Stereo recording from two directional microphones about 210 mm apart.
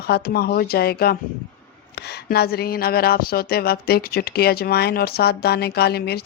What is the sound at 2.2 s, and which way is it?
A woman's voice, 45° left (ahead or behind).